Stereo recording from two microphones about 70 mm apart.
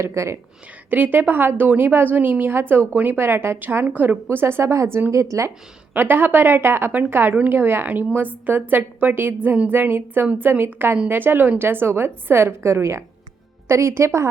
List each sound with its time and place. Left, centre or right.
0.0 s speech: right
0.9 s a woman's voice: right
5.9 s a woman's voice: right